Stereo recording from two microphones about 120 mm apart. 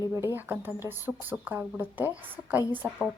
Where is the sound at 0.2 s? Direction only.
15° right (ahead or behind).